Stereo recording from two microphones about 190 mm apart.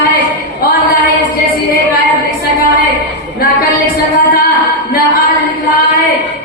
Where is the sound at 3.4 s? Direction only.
55° left (ahead or behind).